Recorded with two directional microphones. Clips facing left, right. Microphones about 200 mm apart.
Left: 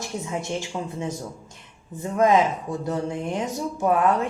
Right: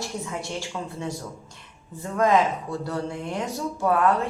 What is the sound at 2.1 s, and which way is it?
Speech, 20° left (ahead or behind).